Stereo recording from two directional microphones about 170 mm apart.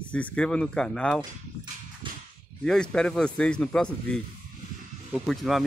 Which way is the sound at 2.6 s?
5° left (ahead or behind).